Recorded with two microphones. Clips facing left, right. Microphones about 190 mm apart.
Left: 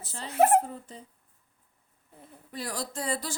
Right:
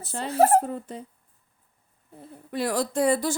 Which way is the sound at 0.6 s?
60° right (ahead or behind).